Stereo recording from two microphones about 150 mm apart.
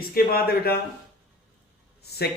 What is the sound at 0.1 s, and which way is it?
Speech, 90° left.